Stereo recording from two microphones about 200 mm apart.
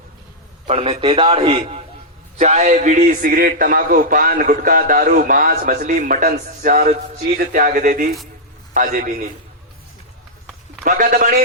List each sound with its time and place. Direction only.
0.7 s a man's voice: 30° right (ahead or behind)
10.8 s a man's voice: 40° right (ahead or behind)